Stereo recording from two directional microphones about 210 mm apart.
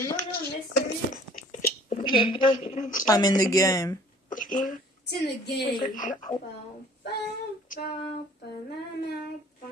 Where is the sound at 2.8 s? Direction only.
40° left (ahead or behind).